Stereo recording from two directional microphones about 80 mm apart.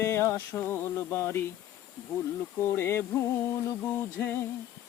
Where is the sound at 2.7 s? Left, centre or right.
Left.